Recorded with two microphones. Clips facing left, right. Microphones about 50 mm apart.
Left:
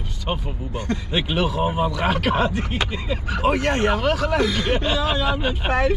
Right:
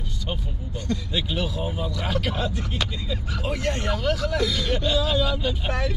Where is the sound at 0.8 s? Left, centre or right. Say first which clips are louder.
Left 3 dB; left.